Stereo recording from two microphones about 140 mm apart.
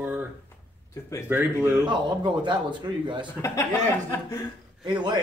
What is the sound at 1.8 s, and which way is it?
Speech, 35° right (ahead or behind).